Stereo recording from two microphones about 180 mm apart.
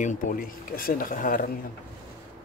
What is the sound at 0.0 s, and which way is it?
Speech, 45° left (ahead or behind).